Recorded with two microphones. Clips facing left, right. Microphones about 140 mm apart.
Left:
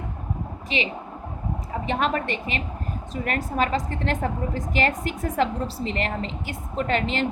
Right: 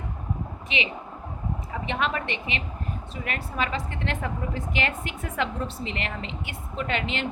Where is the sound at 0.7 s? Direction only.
35° left (ahead or behind).